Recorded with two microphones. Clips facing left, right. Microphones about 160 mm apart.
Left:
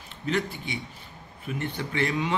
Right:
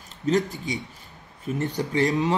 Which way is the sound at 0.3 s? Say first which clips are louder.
Right 5 dB; 40° right (ahead or behind).